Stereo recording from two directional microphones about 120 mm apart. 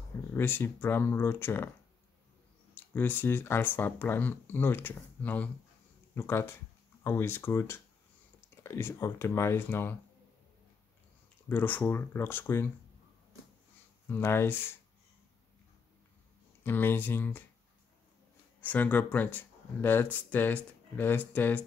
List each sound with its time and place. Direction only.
0.3 s speech: 20° left (ahead or behind)
2.7 s speech: 15° left (ahead or behind)
11.4 s speech: 15° left (ahead or behind)
14.0 s speech: 20° left (ahead or behind)
16.6 s speech: 15° left (ahead or behind)
18.6 s speech: 15° left (ahead or behind)